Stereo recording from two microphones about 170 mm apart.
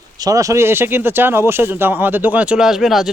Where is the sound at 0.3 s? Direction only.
20° right (ahead or behind).